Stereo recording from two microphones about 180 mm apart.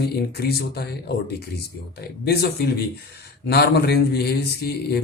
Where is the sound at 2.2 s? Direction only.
65° left (ahead or behind).